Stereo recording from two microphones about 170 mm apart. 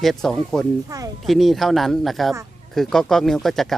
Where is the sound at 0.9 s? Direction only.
20° right (ahead or behind).